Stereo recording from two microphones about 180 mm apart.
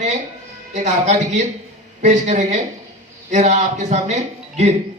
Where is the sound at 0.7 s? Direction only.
40° right (ahead or behind).